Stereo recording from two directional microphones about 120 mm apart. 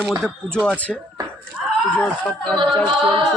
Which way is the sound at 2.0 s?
10° left (ahead or behind).